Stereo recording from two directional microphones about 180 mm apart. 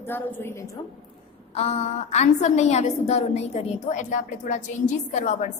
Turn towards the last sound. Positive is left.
turn(degrees=40)  # may be behind; listen again after turning